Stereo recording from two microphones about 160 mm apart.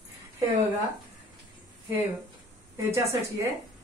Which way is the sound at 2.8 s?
20° right (ahead or behind).